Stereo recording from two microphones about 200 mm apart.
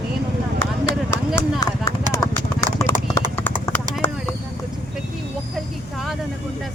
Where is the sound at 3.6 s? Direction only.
10° left (ahead or behind).